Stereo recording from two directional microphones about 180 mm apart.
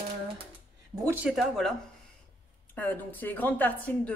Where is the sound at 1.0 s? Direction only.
5° right (ahead or behind).